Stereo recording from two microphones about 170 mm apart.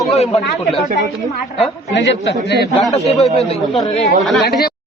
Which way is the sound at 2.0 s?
85° left.